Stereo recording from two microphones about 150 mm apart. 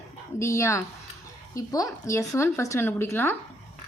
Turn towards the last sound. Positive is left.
turn(degrees=15)  # may be behind; listen again after turning